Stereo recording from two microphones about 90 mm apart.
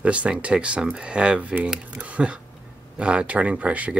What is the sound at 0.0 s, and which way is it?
Speech, 15° right (ahead or behind).